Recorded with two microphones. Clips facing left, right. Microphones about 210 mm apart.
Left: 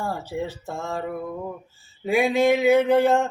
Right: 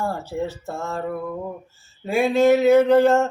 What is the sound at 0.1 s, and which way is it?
Mantra, 15° left (ahead or behind).